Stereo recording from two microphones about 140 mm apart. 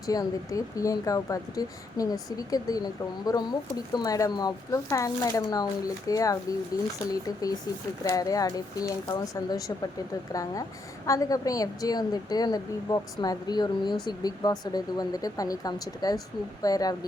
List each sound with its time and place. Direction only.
0.1 s a woman's voice: 25° left (ahead or behind)
8.0 s a woman's voice: 25° left (ahead or behind)